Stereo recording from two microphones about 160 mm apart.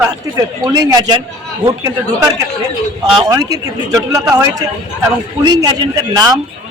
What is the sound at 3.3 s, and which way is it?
A man's voice, 20° right (ahead or behind).